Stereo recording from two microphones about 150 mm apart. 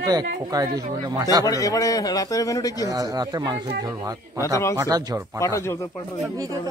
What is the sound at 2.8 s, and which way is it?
Speech, 25° right (ahead or behind).